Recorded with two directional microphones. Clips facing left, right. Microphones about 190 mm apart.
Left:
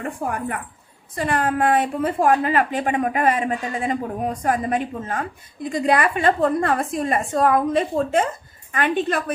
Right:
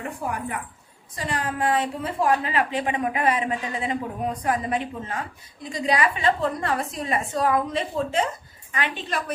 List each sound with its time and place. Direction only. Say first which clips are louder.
0.3 s a woman's voice: left 3 dB; 55° left (ahead or behind)